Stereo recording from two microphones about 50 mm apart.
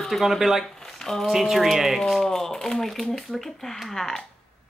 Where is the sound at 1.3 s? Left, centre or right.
Centre.